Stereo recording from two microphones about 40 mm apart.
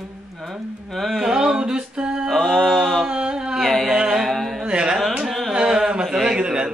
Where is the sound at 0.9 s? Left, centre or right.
Centre.